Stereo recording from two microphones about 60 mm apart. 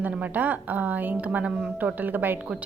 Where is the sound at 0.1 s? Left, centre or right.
Right.